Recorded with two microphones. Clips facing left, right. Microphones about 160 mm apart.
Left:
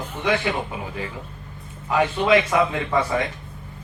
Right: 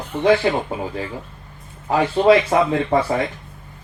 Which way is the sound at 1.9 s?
35° right (ahead or behind).